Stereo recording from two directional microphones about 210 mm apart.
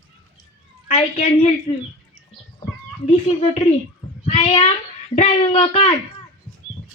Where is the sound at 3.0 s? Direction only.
25° left (ahead or behind).